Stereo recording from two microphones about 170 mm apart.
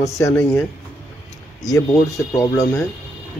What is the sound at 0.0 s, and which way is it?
Speech, 15° left (ahead or behind).